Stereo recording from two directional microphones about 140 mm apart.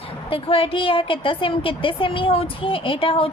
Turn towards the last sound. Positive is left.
turn(degrees=40)  # may be behind; listen again after turning